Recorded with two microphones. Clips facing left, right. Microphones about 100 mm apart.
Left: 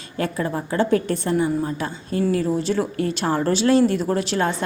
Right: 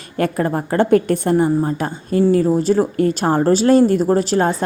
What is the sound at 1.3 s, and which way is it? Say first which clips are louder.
Speech: right 5 dB; 40° right (ahead or behind).